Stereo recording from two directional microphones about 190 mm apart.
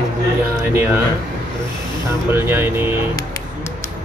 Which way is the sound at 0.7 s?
10° right (ahead or behind).